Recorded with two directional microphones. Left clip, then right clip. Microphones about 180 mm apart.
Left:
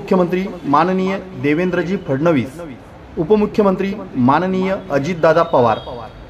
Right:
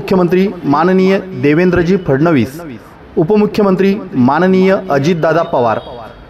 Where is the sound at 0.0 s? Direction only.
40° right (ahead or behind).